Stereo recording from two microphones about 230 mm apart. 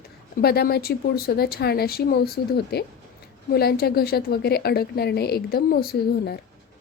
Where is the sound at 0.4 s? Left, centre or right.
Left.